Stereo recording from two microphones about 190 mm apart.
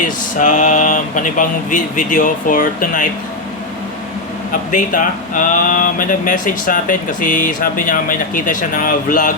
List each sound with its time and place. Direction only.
0.3 s speech: 40° left (ahead or behind)
4.7 s speech: 45° left (ahead or behind)